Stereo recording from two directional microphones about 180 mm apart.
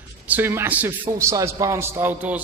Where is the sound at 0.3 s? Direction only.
10° right (ahead or behind).